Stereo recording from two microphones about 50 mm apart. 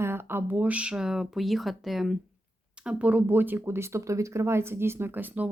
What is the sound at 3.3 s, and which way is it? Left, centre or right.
Speech, right.